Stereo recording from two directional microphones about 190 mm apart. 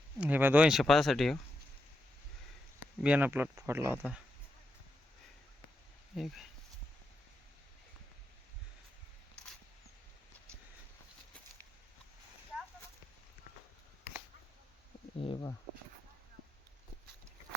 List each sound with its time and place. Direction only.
0.2 s speech: 10° right (ahead or behind)
3.0 s speech: 10° right (ahead or behind)
6.1 s speech: centre (ahead or behind)
15.2 s speech: 30° left (ahead or behind)